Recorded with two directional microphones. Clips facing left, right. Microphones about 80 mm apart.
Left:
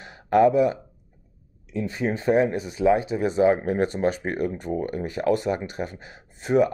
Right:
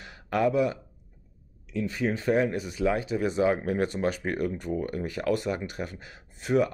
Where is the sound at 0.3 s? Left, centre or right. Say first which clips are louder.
Left 7 dB; left.